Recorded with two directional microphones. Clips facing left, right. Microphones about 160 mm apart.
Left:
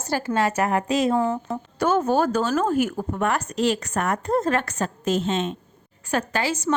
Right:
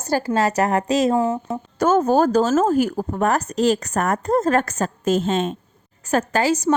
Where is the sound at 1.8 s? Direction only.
45° right (ahead or behind).